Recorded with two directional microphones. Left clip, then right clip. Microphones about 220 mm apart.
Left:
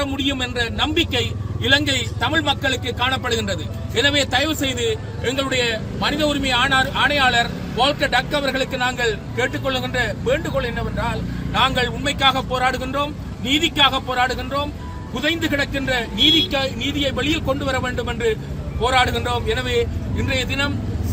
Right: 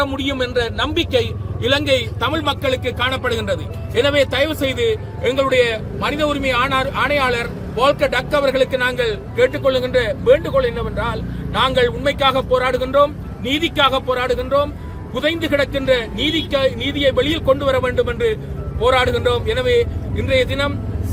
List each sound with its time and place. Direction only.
0.0 s speech: 15° right (ahead or behind)